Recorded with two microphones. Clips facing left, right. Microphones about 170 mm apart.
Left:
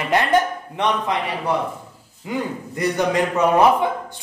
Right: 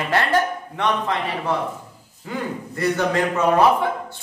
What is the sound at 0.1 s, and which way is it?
Speech, 20° left (ahead or behind).